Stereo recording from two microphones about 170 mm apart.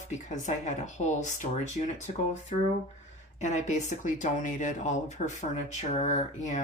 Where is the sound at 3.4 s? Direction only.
45° left (ahead or behind).